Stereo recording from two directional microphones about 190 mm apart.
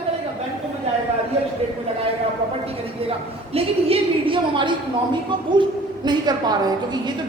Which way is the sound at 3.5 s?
30° right (ahead or behind).